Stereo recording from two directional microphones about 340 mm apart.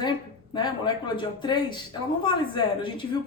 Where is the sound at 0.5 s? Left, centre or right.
Centre.